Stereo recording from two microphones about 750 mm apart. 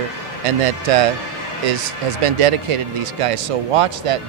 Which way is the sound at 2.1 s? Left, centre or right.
Right.